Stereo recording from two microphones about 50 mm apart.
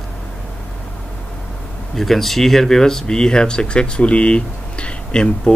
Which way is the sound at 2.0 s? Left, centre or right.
Centre.